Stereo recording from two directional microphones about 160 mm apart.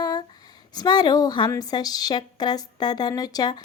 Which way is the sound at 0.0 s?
25° left (ahead or behind).